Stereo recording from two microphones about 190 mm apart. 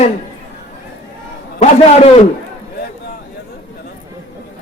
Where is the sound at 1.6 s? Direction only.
35° left (ahead or behind).